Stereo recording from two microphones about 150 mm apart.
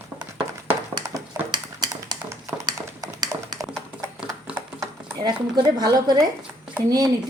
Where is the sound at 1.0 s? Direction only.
30° right (ahead or behind).